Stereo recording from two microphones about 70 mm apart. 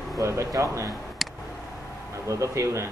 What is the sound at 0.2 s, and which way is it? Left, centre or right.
Speech, right.